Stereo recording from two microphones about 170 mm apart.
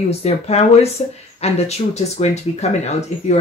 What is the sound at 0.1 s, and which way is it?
Speech, 40° left (ahead or behind).